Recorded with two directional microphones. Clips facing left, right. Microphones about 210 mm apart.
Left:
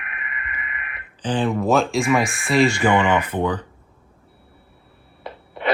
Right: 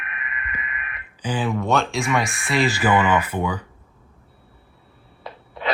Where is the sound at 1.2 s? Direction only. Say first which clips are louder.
Left 3 dB; 5° right (ahead or behind).